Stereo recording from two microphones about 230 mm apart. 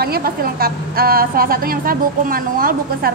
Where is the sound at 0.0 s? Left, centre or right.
Right.